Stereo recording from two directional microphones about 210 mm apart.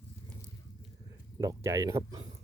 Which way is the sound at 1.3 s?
15° right (ahead or behind).